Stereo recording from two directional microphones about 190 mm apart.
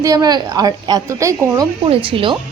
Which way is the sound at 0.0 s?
20° right (ahead or behind).